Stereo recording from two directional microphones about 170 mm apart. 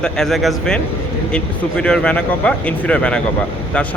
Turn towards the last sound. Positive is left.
turn(degrees=5)  # may be behind; listen again after turning